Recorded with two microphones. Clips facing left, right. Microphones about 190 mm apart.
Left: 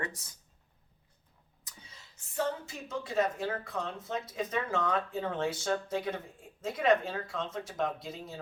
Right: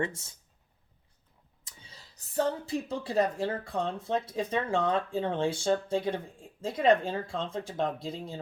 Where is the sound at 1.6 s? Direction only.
30° right (ahead or behind).